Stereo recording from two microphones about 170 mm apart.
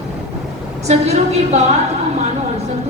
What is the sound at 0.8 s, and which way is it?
Speech, 40° right (ahead or behind).